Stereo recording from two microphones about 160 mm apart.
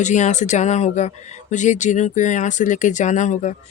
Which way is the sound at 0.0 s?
50° left (ahead or behind).